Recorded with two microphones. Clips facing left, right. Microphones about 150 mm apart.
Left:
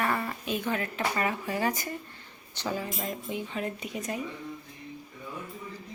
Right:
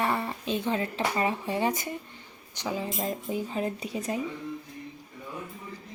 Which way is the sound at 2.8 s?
30° right (ahead or behind).